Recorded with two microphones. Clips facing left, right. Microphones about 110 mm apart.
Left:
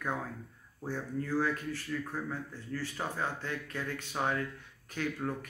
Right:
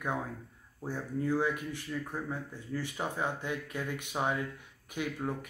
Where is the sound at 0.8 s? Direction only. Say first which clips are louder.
Right 3 dB; 15° right (ahead or behind).